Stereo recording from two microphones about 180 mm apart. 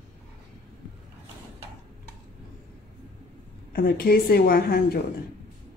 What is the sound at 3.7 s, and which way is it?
A woman's voice, 55° left (ahead or behind).